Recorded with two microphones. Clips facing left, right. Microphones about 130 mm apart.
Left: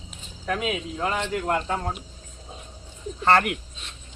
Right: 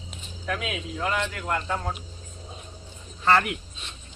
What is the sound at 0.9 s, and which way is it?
Speech, 25° left (ahead or behind).